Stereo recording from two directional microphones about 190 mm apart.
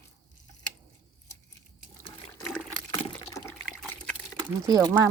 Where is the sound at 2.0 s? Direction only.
15° left (ahead or behind).